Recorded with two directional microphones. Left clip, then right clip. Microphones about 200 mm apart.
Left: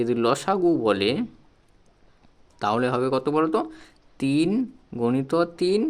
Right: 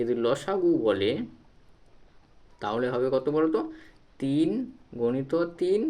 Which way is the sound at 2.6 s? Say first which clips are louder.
Left 4 dB; 40° left (ahead or behind).